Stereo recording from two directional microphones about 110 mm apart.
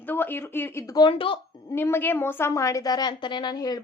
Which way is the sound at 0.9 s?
50° left (ahead or behind).